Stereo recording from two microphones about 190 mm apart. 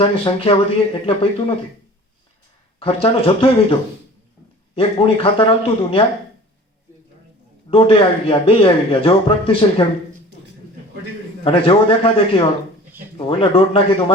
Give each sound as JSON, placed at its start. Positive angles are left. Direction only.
{"t": 0.0, "sound": "speech", "side_deg": 30}
{"t": 2.7, "sound": "speech", "side_deg": 30}
{"t": 7.7, "sound": "speech", "side_deg": 30}
{"t": 11.4, "sound": "speech", "side_deg": 30}